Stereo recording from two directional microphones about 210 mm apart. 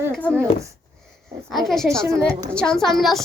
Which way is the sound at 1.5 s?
Centre (ahead or behind).